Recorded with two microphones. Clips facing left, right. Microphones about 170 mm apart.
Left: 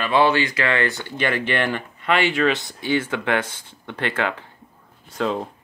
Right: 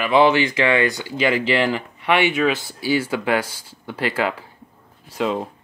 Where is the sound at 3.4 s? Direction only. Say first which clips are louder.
Left 1 dB; 35° right (ahead or behind).